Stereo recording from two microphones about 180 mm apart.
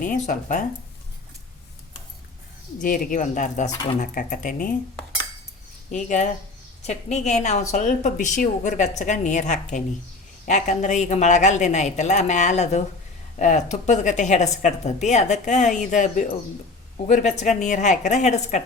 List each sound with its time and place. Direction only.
0.0 s speech: 50° left (ahead or behind)
2.8 s speech: 50° left (ahead or behind)
5.9 s a woman's voice: 45° left (ahead or behind)